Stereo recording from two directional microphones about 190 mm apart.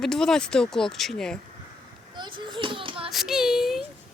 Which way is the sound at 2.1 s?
25° right (ahead or behind).